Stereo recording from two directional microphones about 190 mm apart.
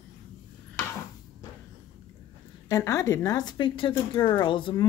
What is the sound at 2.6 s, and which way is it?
Speech, 20° left (ahead or behind).